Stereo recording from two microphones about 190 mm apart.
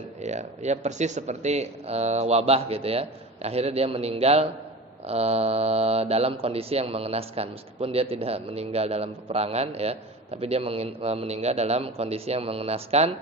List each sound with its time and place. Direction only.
0.2 s speech: 35° right (ahead or behind)